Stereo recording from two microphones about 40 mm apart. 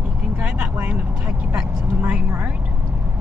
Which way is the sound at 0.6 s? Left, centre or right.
Right.